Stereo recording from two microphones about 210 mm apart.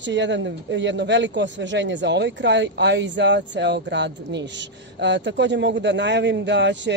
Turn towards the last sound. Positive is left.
turn(degrees=-55)  # may be behind; listen again after turning